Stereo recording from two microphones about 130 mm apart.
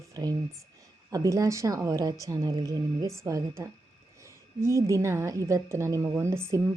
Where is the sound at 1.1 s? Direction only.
25° right (ahead or behind).